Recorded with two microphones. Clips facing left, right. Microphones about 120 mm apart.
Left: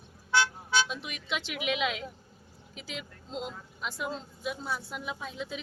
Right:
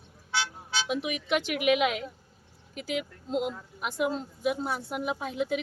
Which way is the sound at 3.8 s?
55° right (ahead or behind).